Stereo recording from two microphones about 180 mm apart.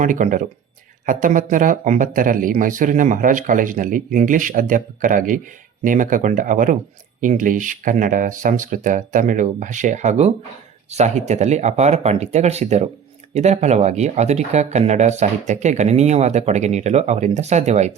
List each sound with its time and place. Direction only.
0.0 s speech: 45° right (ahead or behind)